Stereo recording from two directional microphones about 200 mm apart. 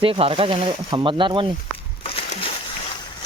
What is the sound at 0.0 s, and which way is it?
Speech, 30° right (ahead or behind).